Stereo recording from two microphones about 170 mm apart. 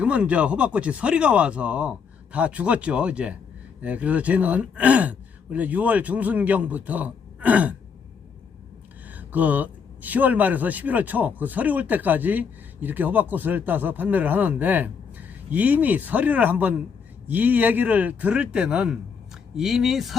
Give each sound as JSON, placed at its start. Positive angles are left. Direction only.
{"t": 0.0, "sound": "speech", "side_deg": -5}
{"t": 9.0, "sound": "speech", "side_deg": -10}